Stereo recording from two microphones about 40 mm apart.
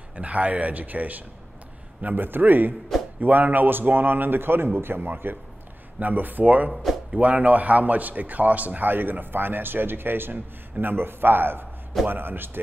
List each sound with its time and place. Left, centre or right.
0.1 s a man's voice: right
6.7 s speech: centre
7.2 s a man's voice: right